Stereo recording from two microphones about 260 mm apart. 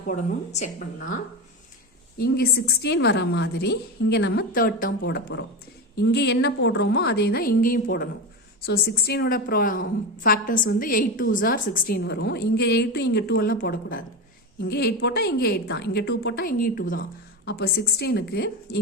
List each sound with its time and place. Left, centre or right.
0.1 s a woman's voice: left
2.1 s a woman's voice: left